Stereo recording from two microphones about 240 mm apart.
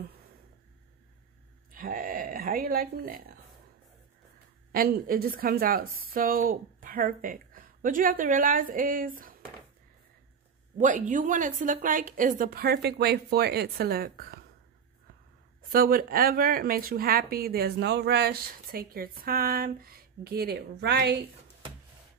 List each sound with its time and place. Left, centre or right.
1.7 s speech: right
4.7 s speech: right
10.8 s speech: right
15.7 s speech: right